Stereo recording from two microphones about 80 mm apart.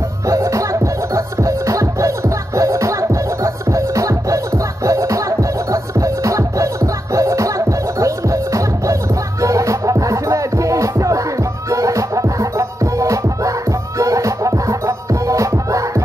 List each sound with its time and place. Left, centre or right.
0.3 s music: right